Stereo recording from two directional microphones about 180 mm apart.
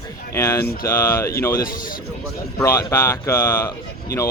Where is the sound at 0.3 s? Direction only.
15° left (ahead or behind).